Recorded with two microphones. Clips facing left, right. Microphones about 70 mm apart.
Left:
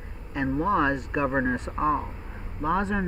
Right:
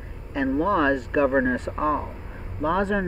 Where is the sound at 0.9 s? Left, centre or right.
Centre.